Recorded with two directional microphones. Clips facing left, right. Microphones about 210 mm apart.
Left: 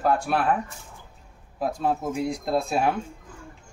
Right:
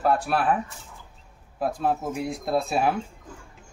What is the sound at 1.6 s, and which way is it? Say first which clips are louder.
Speech: even; centre (ahead or behind).